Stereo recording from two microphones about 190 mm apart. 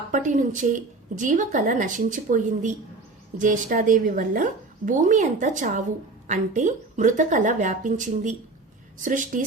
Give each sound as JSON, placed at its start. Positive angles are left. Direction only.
{"t": 0.1, "sound": "a woman's voice", "side_deg": -40}